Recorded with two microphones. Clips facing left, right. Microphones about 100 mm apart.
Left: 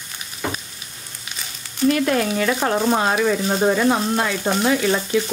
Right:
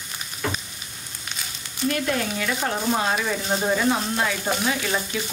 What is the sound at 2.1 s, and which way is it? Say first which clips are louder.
Speech: left 6 dB; 55° left (ahead or behind).